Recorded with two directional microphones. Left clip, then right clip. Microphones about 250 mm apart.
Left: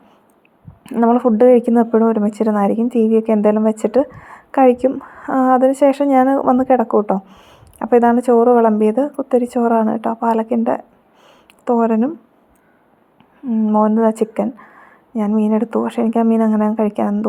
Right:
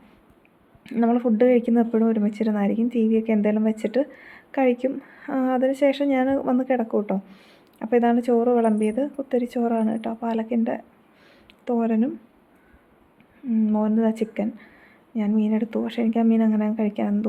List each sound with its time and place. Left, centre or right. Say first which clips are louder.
0.9 s a woman's voice: left 8 dB; centre
13.5 s speech: left 8 dB; centre